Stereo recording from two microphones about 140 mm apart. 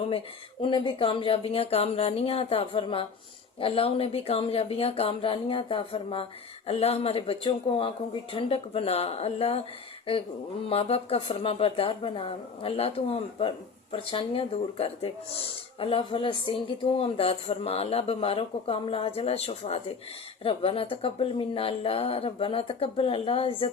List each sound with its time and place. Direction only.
0.6 s speech: 35° left (ahead or behind)
10.7 s speech: 45° left (ahead or behind)